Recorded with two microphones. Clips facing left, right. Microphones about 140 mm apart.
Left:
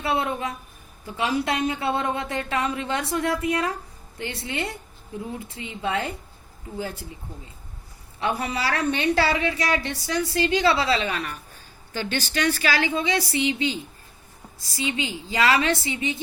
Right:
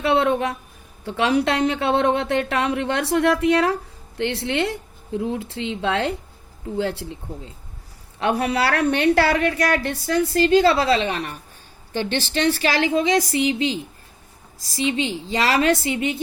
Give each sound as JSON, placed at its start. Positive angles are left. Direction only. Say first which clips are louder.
{"t": 0.0, "sound": "speech", "louder": "right 6 dB", "side_deg": -75}
{"t": 8.2, "sound": "a woman's voice", "louder": "right 5 dB", "side_deg": -70}
{"t": 11.0, "sound": "speech", "louder": "right 3 dB", "side_deg": -35}
{"t": 14.8, "sound": "speech", "louder": "right 5 dB", "side_deg": -30}
{"t": 15.6, "sound": "a woman's voice", "louder": "right 5 dB", "side_deg": -50}